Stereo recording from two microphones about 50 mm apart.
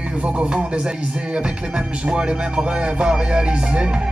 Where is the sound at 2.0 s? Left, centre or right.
Centre.